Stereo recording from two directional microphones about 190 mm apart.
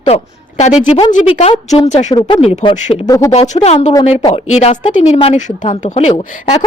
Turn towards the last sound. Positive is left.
turn(degrees=25)  # may be behind; listen again after turning